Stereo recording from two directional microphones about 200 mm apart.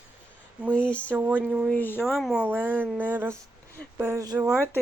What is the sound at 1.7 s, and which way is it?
Speech, 10° left (ahead or behind).